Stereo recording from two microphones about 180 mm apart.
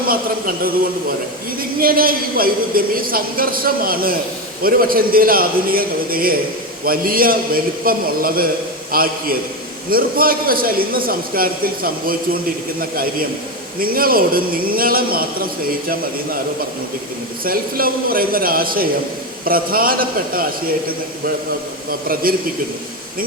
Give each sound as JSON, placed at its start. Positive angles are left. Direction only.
{"t": 1.8, "sound": "a man's voice", "side_deg": -55}
{"t": 13.7, "sound": "a man's voice", "side_deg": -55}
{"t": 17.4, "sound": "a man's voice", "side_deg": -55}
{"t": 21.8, "sound": "a man's voice", "side_deg": -55}